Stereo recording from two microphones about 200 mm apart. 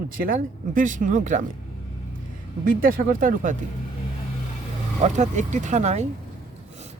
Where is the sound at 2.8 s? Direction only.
45° right (ahead or behind).